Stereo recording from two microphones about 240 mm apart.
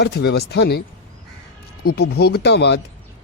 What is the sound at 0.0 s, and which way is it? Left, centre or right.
Speech, left.